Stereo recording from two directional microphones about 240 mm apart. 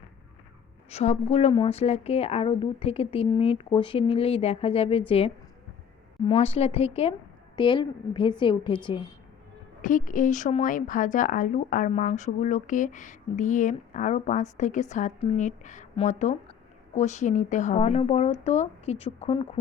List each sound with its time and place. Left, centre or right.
0.9 s a woman's voice: left
9.8 s speech: left